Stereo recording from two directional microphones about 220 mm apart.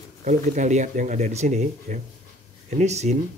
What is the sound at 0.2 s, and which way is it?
Speech, 35° right (ahead or behind).